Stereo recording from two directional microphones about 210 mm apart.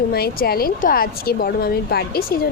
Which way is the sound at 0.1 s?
45° left (ahead or behind).